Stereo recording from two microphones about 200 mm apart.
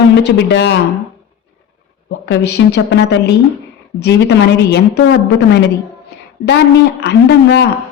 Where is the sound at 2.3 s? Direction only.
60° left (ahead or behind).